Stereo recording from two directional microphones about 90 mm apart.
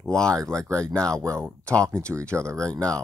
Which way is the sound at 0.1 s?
10° left (ahead or behind).